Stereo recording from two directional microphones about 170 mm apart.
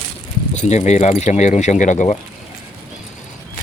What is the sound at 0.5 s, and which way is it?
Speech, 45° left (ahead or behind).